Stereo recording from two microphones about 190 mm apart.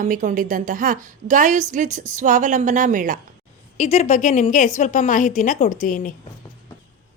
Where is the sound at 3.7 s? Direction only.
35° left (ahead or behind).